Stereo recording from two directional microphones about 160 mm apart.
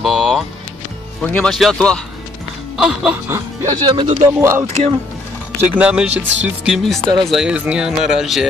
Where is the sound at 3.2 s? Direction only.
20° right (ahead or behind).